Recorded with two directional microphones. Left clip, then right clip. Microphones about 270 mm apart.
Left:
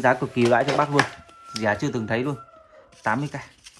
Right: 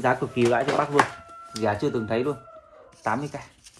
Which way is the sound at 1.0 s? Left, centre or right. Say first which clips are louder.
Right 1 dB; centre.